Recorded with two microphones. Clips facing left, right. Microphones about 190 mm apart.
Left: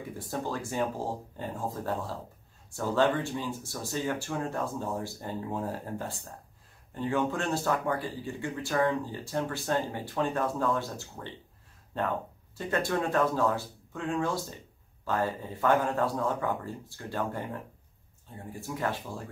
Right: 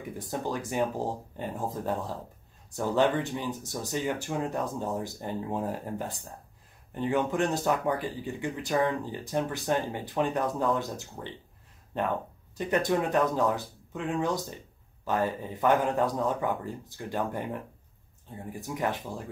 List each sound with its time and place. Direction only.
0.3 s speech: 15° right (ahead or behind)
12.5 s speech: 15° right (ahead or behind)
18.5 s speech: 15° right (ahead or behind)